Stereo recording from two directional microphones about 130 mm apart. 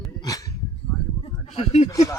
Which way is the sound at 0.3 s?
25° left (ahead or behind).